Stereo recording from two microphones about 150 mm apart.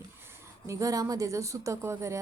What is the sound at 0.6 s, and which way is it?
A woman's voice, 20° right (ahead or behind).